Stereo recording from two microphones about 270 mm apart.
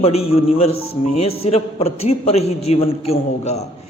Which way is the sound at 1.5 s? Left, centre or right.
Left.